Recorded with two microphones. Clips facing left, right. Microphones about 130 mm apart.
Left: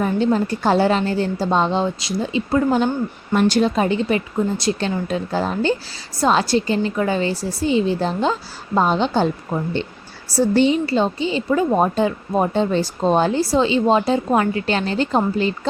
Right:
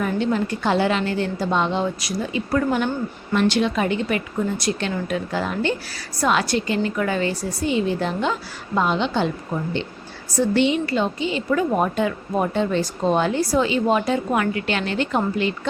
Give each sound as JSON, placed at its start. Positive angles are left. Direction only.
{"t": 0.0, "sound": "a woman's voice", "side_deg": 35}
{"t": 3.3, "sound": "a woman's voice", "side_deg": 40}